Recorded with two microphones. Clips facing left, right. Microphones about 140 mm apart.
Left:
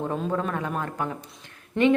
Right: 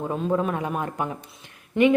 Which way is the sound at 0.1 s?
10° right (ahead or behind).